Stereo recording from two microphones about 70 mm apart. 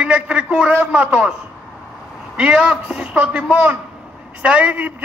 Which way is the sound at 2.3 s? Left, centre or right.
Centre.